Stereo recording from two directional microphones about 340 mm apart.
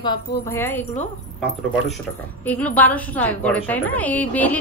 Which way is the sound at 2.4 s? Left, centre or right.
Centre.